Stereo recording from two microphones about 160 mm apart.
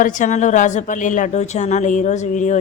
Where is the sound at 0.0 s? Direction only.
55° left (ahead or behind).